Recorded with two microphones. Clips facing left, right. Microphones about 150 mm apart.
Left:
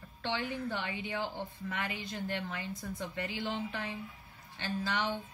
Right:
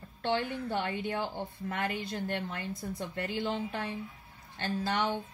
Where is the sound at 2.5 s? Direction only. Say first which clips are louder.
Right 2 dB; 50° right (ahead or behind).